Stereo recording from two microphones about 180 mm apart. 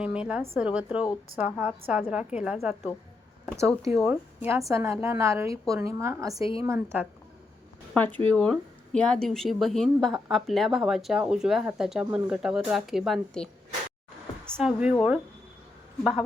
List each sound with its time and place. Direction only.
0.0 s a woman's voice: 5° right (ahead or behind)
3.4 s a sound: 15° right (ahead or behind)
4.0 s a woman's voice: 10° right (ahead or behind)
7.9 s speech: 10° left (ahead or behind)
14.5 s speech: centre (ahead or behind)